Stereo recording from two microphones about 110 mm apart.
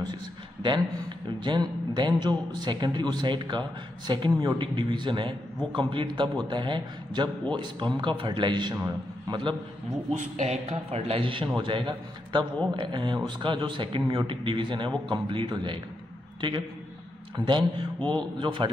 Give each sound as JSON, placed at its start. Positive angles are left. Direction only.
{"t": 0.0, "sound": "a sound", "side_deg": -40}
{"t": 1.4, "sound": "a man's voice", "side_deg": -45}
{"t": 10.4, "sound": "a man's voice", "side_deg": -75}